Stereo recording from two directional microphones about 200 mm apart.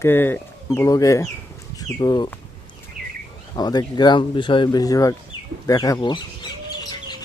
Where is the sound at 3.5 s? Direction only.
20° left (ahead or behind).